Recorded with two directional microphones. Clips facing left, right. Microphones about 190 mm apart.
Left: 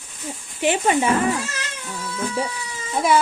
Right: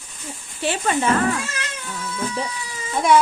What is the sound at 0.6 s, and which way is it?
Speech, 15° left (ahead or behind).